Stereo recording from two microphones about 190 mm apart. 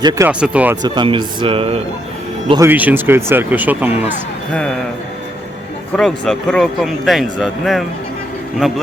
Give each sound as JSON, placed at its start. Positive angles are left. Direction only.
{"t": 0.0, "sound": "speech", "side_deg": -20}
{"t": 0.3, "sound": "speech", "side_deg": -5}
{"t": 0.8, "sound": "speech", "side_deg": -25}
{"t": 2.6, "sound": "speech", "side_deg": -10}
{"t": 6.0, "sound": "speech", "side_deg": 0}